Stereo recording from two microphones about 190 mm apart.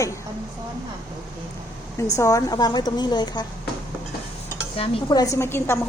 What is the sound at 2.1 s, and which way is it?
A woman's voice, 15° left (ahead or behind).